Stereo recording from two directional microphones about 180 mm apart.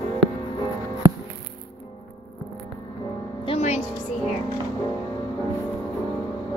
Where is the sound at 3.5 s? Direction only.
35° left (ahead or behind).